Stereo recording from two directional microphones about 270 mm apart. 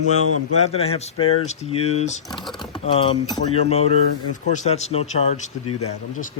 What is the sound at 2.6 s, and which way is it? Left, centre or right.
Speech, centre.